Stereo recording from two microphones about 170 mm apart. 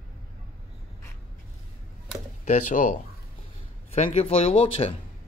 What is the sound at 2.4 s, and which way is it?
Speech, 50° left (ahead or behind).